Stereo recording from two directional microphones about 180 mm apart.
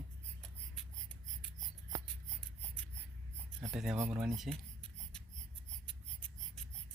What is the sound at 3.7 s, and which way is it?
Speech, 5° right (ahead or behind).